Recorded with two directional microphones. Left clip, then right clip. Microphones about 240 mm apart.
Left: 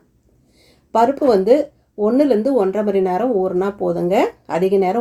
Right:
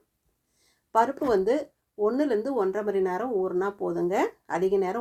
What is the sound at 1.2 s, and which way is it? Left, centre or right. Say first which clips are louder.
Speech: left 11 dB; right.